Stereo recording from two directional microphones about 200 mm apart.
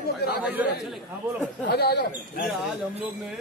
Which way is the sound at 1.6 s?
50° left (ahead or behind).